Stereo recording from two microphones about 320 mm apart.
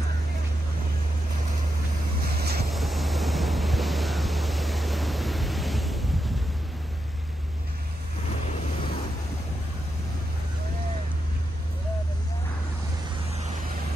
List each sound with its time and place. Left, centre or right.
2.3 s vehicle: right
2.7 s waves: centre